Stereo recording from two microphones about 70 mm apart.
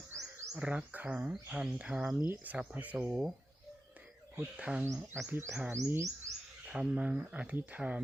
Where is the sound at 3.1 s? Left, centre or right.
Centre.